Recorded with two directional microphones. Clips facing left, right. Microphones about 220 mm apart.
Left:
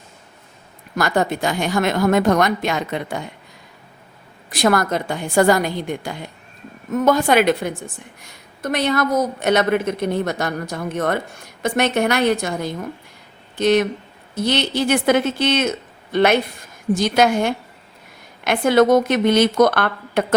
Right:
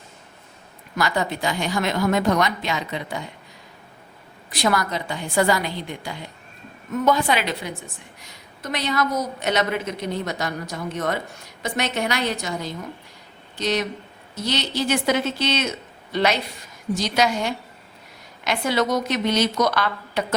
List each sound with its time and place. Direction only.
0.9 s a woman's voice: 50° left (ahead or behind)
4.5 s a woman's voice: 50° left (ahead or behind)